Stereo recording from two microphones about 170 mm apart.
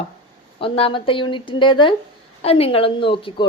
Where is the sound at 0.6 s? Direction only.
30° left (ahead or behind).